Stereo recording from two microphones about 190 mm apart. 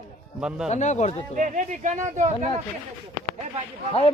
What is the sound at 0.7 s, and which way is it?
Speech, 40° left (ahead or behind).